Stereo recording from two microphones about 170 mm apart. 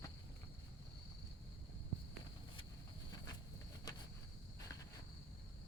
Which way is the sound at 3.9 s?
25° left (ahead or behind).